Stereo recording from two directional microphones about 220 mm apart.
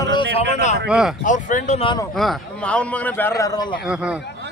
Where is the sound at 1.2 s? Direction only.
35° left (ahead or behind).